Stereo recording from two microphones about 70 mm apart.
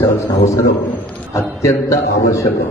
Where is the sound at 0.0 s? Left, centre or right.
Left.